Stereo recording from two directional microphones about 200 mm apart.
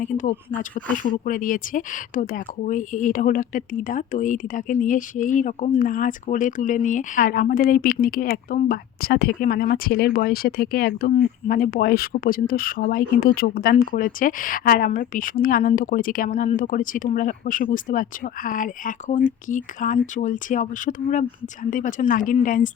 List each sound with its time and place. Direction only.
0.0 s speech: 40° left (ahead or behind)